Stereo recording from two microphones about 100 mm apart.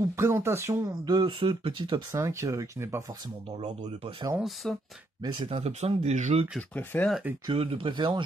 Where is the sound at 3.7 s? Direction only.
90° right.